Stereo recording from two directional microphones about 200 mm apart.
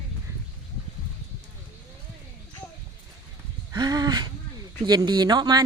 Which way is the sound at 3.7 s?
20° right (ahead or behind).